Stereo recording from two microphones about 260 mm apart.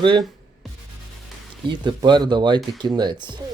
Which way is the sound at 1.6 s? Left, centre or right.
Centre.